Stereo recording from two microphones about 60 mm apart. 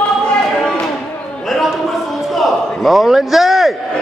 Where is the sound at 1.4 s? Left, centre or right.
Centre.